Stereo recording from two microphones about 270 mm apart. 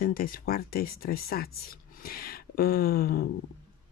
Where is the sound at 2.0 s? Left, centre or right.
Left.